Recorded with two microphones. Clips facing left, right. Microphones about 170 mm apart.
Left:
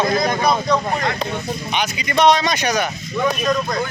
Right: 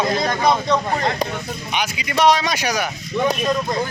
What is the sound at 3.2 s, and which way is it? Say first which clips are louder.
Speech: left 1 dB; 25° right (ahead or behind).